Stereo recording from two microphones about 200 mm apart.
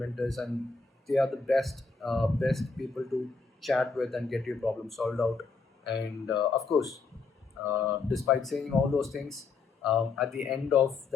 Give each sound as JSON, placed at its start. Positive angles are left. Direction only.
{"t": 0.0, "sound": "speech", "side_deg": 0}
{"t": 6.3, "sound": "speech", "side_deg": 20}
{"t": 7.6, "sound": "speech", "side_deg": -10}